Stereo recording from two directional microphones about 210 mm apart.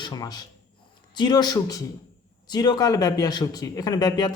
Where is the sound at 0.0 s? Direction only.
20° left (ahead or behind).